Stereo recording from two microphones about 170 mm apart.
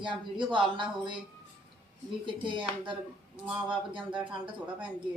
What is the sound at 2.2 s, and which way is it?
A woman's voice, 30° right (ahead or behind).